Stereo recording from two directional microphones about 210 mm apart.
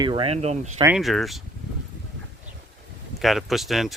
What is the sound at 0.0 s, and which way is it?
Speech, 25° right (ahead or behind).